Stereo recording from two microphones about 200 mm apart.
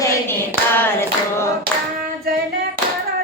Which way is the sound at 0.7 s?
10° left (ahead or behind).